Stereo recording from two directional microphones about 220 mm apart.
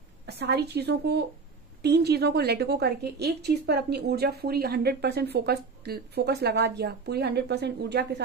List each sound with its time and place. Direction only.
0.3 s a woman's voice: 45° right (ahead or behind)